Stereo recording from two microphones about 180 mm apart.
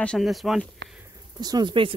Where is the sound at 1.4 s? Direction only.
25° right (ahead or behind).